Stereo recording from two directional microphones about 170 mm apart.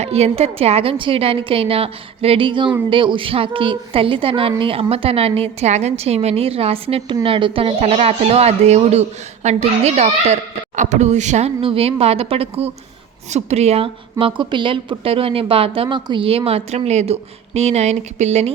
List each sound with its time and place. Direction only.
0.0 s a woman's voice: 35° right (ahead or behind)